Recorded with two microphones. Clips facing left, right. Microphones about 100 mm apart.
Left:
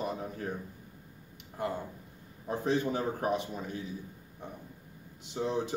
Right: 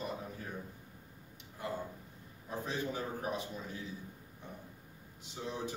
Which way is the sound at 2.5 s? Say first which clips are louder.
Left 8 dB; 65° left (ahead or behind).